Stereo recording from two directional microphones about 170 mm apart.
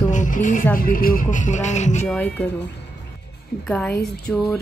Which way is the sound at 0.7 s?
55° left (ahead or behind).